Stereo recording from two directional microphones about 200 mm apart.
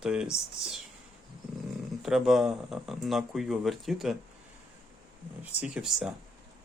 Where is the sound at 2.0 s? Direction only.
Centre (ahead or behind).